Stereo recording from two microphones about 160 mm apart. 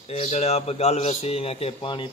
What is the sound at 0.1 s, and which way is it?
A man's voice, 40° left (ahead or behind).